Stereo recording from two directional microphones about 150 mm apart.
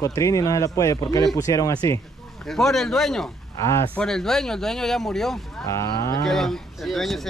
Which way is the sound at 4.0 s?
5° left (ahead or behind).